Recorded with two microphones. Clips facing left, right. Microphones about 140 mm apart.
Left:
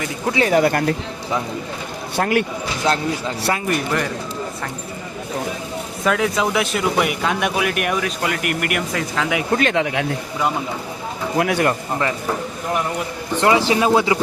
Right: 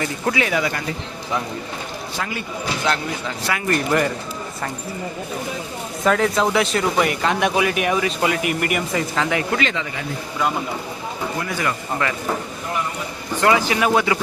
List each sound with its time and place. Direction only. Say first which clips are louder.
0.3 s speech: left 7 dB; 40° left (ahead or behind)
0.6 s speech: left 7 dB; 55° left (ahead or behind)
2.1 s speech: left 11 dB; 60° left (ahead or behind)
3.7 s speech: right 7 dB; centre (ahead or behind)
6.1 s speech: right 1 dB; centre (ahead or behind)
9.6 s speech: left 6 dB; 55° left (ahead or behind)
11.3 s speech: left 13 dB; 80° left
13.4 s speech: left 2 dB; 25° left (ahead or behind)